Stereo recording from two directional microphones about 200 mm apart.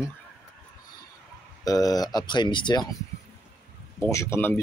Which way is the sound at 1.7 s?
20° left (ahead or behind).